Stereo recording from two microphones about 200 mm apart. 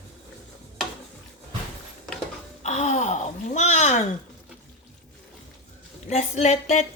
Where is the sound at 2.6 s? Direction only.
35° left (ahead or behind).